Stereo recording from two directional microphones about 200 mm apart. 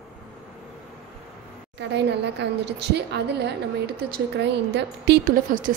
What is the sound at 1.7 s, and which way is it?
A woman's voice, 60° right (ahead or behind).